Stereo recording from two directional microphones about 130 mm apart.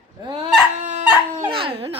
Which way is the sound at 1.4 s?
45° right (ahead or behind).